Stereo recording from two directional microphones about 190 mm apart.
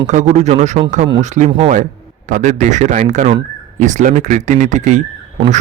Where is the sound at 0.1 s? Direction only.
40° right (ahead or behind).